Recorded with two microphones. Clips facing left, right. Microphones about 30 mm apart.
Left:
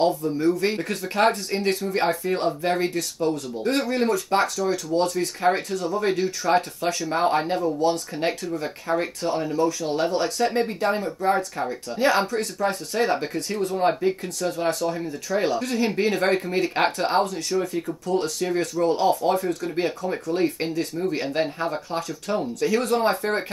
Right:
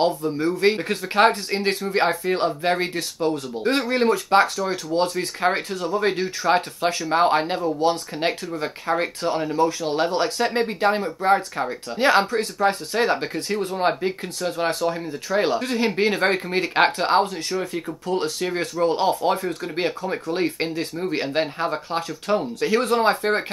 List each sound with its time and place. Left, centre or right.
0.0 s speech: right